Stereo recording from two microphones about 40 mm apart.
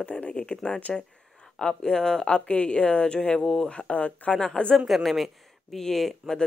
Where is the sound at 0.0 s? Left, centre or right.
Left.